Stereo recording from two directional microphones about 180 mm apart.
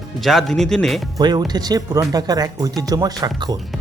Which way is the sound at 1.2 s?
25° right (ahead or behind).